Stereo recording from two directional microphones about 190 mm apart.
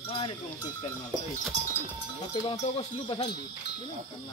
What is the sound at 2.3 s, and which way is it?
Speech, 25° left (ahead or behind).